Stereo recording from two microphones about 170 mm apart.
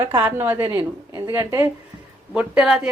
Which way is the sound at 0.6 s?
30° right (ahead or behind).